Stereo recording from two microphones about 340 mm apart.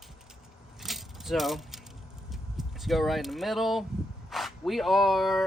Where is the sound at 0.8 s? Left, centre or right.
Centre.